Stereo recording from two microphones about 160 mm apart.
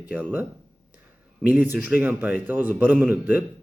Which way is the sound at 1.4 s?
5° right (ahead or behind).